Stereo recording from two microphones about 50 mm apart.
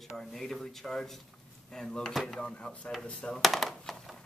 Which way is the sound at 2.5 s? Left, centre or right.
Left.